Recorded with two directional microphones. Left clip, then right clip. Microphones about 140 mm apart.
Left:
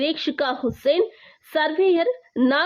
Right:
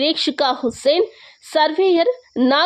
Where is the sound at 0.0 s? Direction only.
15° right (ahead or behind).